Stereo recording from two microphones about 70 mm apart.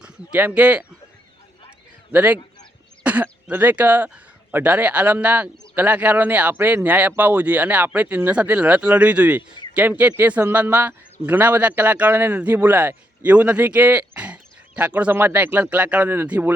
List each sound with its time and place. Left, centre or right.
0.0 s speech: centre
2.1 s speech: right